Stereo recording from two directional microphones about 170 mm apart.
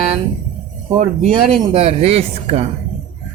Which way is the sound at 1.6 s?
35° right (ahead or behind).